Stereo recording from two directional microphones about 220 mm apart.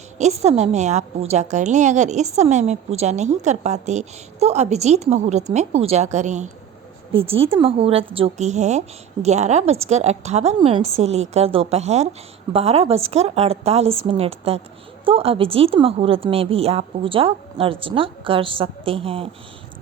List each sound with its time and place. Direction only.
0.2 s a woman's voice: 30° right (ahead or behind)